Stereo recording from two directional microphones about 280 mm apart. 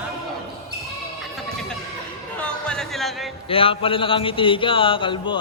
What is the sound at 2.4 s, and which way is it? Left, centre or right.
Music, centre.